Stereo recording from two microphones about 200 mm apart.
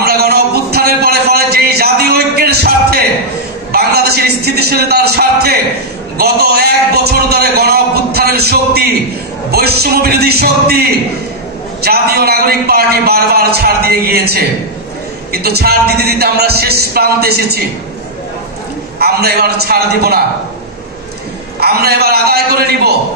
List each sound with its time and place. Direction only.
0.0 s a sound: 50° right (ahead or behind)
3.7 s a man's voice: 50° right (ahead or behind)
18.9 s a man's voice: 50° right (ahead or behind)
21.5 s a man's voice: 50° right (ahead or behind)